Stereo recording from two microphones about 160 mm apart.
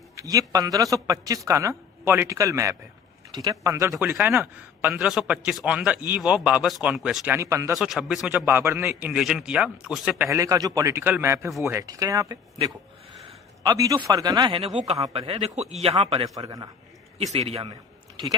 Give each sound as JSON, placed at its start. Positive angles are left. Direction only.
{"t": 0.2, "sound": "a woman's voice", "side_deg": -20}
{"t": 4.4, "sound": "a man's voice", "side_deg": 0}
{"t": 7.7, "sound": "a man's voice", "side_deg": 0}
{"t": 8.4, "sound": "a man's voice", "side_deg": -15}
{"t": 10.2, "sound": "a woman's voice", "side_deg": -20}
{"t": 13.6, "sound": "a woman's voice", "side_deg": -20}
{"t": 17.3, "sound": "a man's voice", "side_deg": -40}